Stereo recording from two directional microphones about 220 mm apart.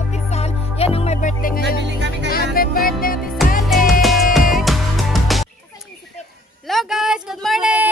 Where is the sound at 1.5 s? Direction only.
50° right (ahead or behind).